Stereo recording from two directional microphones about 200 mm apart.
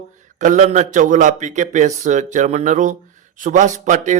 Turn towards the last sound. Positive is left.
turn(degrees=-40)  # may be behind; listen again after turning